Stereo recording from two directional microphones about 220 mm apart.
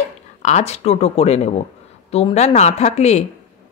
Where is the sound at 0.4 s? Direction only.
30° left (ahead or behind).